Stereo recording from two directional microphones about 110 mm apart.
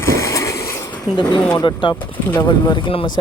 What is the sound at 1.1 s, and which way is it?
Speech, 45° left (ahead or behind).